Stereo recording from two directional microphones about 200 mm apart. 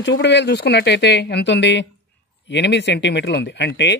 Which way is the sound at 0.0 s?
65° left (ahead or behind).